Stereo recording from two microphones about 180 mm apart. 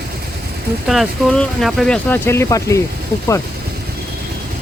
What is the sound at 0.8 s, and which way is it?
Speech, centre (ahead or behind).